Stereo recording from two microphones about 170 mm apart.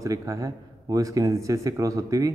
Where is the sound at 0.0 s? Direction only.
20° right (ahead or behind).